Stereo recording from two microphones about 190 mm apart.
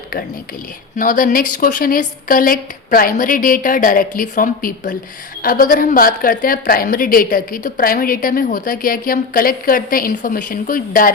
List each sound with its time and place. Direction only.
0.9 s a woman's voice: 45° left (ahead or behind)